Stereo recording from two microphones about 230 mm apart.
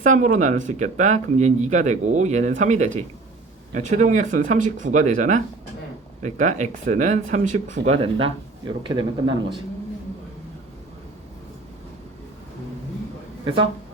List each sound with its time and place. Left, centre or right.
0.0 s speech: right